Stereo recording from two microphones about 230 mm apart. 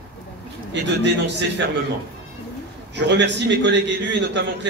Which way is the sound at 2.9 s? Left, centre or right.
Right.